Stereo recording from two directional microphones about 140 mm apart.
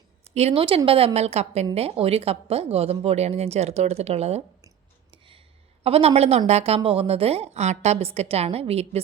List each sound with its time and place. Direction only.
0.3 s speech: 50° right (ahead or behind)
5.1 s a sound: 35° right (ahead or behind)
5.8 s speech: 45° right (ahead or behind)